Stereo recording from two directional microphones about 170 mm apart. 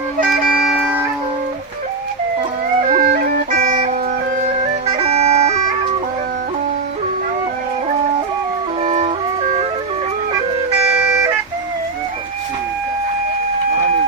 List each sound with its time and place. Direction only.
0.6 s wind instrument: 5° right (ahead or behind)
2.9 s music: 55° right (ahead or behind)
4.4 s bagpipes: 40° right (ahead or behind)
8.8 s music: 40° right (ahead or behind)